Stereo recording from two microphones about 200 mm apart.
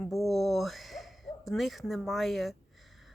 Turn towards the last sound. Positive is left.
turn(degrees=0)  # may be behind; listen again after turning